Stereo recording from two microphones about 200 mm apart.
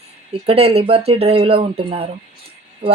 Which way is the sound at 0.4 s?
30° right (ahead or behind).